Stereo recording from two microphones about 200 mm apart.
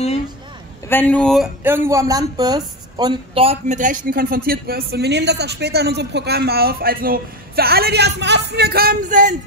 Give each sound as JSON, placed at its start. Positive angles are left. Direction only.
{"t": 0.8, "sound": "a man's voice", "side_deg": 10}
{"t": 1.6, "sound": "speech", "side_deg": -15}